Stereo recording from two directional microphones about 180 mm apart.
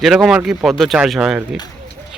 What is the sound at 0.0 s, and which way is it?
Speech, centre (ahead or behind).